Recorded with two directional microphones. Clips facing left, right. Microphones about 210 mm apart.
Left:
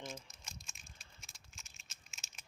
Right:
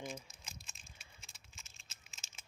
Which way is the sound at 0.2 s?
5° right (ahead or behind).